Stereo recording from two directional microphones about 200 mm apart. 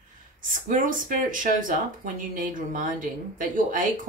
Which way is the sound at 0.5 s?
40° right (ahead or behind).